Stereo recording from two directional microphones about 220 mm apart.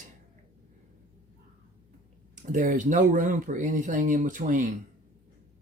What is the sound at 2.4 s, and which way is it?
Speech, 35° right (ahead or behind).